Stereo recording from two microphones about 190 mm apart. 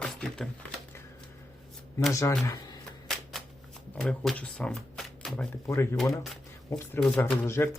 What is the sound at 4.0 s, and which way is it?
Speech, 5° left (ahead or behind).